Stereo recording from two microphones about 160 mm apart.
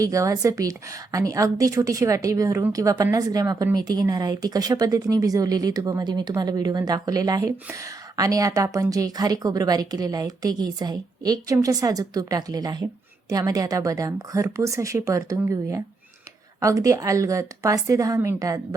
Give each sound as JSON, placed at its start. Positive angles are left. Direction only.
{"t": 0.0, "sound": "a woman's voice", "side_deg": -20}